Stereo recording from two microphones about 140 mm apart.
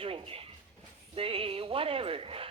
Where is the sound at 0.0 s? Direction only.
40° right (ahead or behind).